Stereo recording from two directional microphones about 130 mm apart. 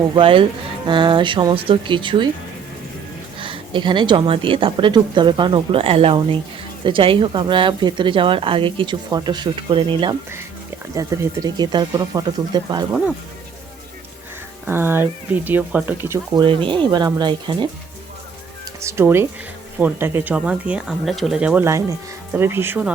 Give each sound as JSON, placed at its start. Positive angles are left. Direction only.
{"t": 0.2, "sound": "a woman's voice", "side_deg": -45}
{"t": 3.4, "sound": "a woman's voice", "side_deg": -40}
{"t": 10.9, "sound": "a woman's voice", "side_deg": -25}
{"t": 14.7, "sound": "speech", "side_deg": -15}
{"t": 16.3, "sound": "a woman's voice", "side_deg": -40}
{"t": 18.8, "sound": "speech", "side_deg": -20}
{"t": 21.6, "sound": "speech", "side_deg": -20}